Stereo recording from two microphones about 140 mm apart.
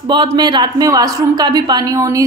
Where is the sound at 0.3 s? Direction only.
30° right (ahead or behind).